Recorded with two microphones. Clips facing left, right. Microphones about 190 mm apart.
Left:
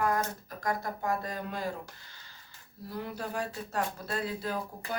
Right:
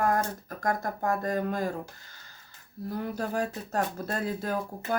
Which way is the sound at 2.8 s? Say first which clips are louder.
Right 5 dB; 50° right (ahead or behind).